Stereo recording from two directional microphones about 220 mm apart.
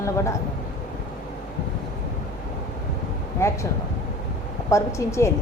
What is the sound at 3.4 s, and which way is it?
Speech, 15° left (ahead or behind).